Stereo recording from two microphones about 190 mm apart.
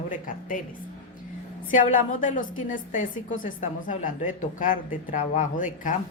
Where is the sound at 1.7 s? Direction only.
40° left (ahead or behind).